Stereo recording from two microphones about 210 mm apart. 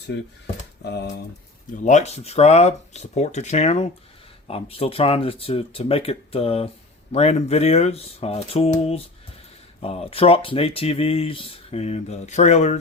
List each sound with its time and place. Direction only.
0.9 s speech: 50° left (ahead or behind)
1.7 s speech: 35° left (ahead or behind)